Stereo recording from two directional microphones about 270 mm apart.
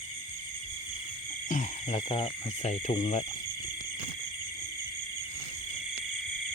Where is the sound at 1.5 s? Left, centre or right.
Left.